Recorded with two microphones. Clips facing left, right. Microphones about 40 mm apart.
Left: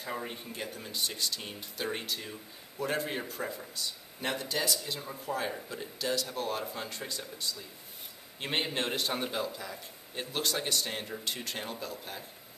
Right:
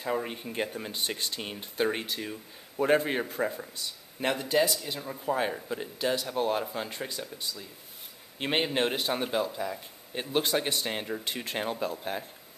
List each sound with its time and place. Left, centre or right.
0.0 s a man's voice: right
0.5 s a man's voice: right